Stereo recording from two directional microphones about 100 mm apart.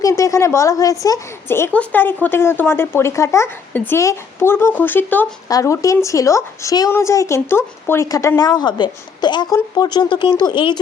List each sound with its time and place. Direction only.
0.0 s speech: 30° left (ahead or behind)
1.5 s speech: 25° left (ahead or behind)
5.5 s speech: 35° left (ahead or behind)
8.0 s a woman's voice: 35° left (ahead or behind)